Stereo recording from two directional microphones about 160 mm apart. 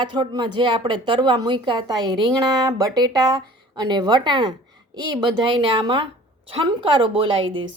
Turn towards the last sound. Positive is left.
turn(degrees=-35)  # may be behind; listen again after turning